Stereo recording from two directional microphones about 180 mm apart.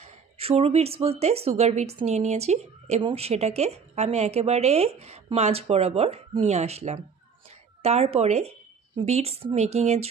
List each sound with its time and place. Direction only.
0.0 s speech: 35° right (ahead or behind)